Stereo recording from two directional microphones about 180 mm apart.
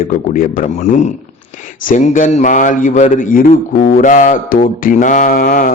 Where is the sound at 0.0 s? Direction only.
45° left (ahead or behind).